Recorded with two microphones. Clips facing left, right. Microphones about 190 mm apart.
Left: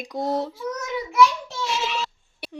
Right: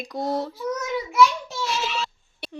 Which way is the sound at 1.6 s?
10° left (ahead or behind).